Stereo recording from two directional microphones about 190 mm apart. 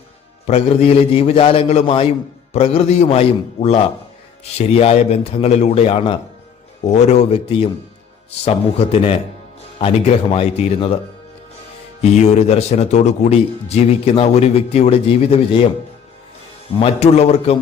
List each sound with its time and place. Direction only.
0.4 s speech: 30° left (ahead or behind)
12.1 s speech: 35° left (ahead or behind)
16.8 s speech: 35° left (ahead or behind)